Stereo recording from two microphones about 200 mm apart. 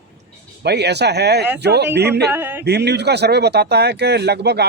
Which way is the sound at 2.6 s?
55° right (ahead or behind).